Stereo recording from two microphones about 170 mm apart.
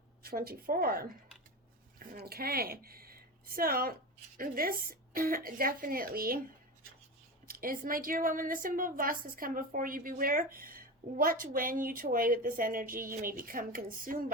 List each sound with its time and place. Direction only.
0.2 s a woman's voice: 65° right (ahead or behind)
7.4 s a woman's voice: 60° right (ahead or behind)